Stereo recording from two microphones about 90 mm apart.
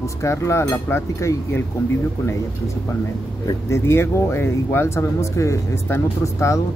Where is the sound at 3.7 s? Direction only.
30° left (ahead or behind).